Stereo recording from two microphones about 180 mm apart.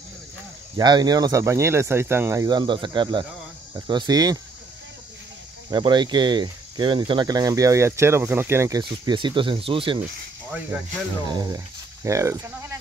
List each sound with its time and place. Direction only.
0.7 s speech: 25° right (ahead or behind)
5.7 s speech: 25° right (ahead or behind)
11.2 s speech: 20° right (ahead or behind)